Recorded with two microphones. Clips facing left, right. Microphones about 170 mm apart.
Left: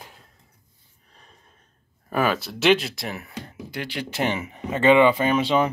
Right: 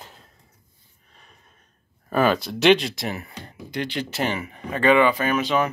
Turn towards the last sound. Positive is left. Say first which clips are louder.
# left 2 dB
turn(degrees=30)  # may be behind; listen again after turning